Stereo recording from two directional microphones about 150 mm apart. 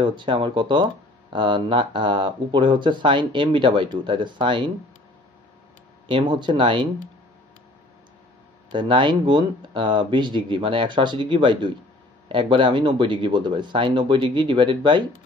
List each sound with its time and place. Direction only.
0.0 s speech: 30° right (ahead or behind)
6.0 s speech: 30° right (ahead or behind)
8.7 s speech: 35° right (ahead or behind)